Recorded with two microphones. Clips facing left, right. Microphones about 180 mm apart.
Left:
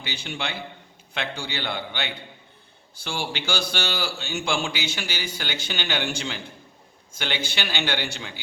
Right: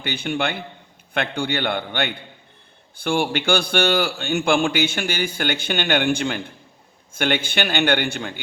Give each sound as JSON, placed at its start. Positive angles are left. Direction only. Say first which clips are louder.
{"t": 0.0, "sound": "a man's voice", "louder": "right 8 dB", "side_deg": -55}